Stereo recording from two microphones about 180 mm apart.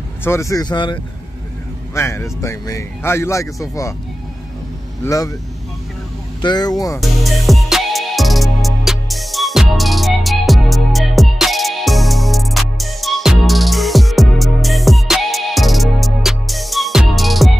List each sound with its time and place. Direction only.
0.2 s speech: 15° left (ahead or behind)
2.0 s speech: 15° left (ahead or behind)
5.0 s speech: 20° left (ahead or behind)
6.4 s speech: 25° left (ahead or behind)
7.0 s music: centre (ahead or behind)